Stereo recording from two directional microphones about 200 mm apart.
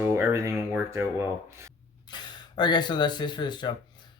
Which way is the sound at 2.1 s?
20° left (ahead or behind).